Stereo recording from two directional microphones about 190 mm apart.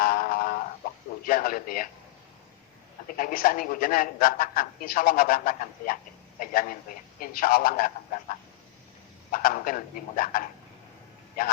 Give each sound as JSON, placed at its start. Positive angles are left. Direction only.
{"t": 0.0, "sound": "a sound", "side_deg": 50}
{"t": 1.2, "sound": "a man's voice", "side_deg": 50}
{"t": 3.2, "sound": "a man's voice", "side_deg": 50}